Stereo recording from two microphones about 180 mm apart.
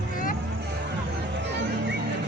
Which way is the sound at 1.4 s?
70° right (ahead or behind).